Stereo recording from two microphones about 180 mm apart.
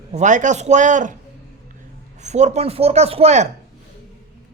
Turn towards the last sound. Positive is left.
turn(degrees=-40)  # may be behind; listen again after turning